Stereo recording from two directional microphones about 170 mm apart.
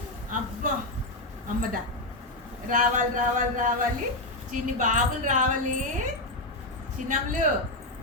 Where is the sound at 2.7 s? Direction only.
50° right (ahead or behind).